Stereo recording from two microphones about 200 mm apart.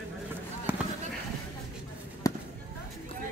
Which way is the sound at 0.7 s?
10° right (ahead or behind).